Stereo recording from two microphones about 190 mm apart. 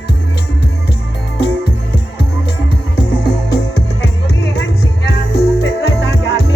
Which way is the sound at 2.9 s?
60° left (ahead or behind).